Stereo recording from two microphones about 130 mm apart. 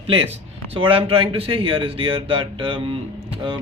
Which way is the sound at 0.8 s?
45° right (ahead or behind).